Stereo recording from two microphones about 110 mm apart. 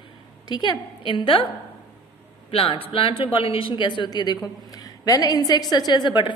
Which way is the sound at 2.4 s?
60° left (ahead or behind).